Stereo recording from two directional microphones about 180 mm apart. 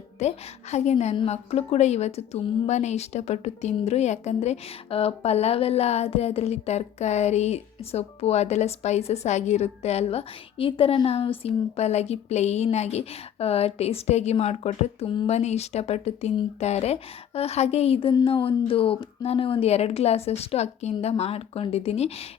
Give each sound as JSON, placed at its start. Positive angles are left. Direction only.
{"t": 0.2, "sound": "a woman's voice", "side_deg": 40}